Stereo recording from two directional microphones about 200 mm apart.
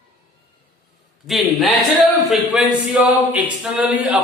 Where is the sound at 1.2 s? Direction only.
Centre (ahead or behind).